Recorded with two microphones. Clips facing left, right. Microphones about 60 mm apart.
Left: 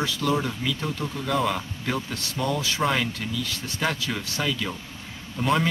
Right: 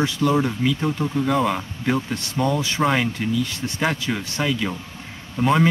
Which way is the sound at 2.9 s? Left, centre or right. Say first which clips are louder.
Right 5 dB; centre.